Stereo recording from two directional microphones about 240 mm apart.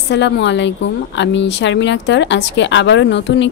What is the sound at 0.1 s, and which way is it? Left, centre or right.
A woman's voice, left.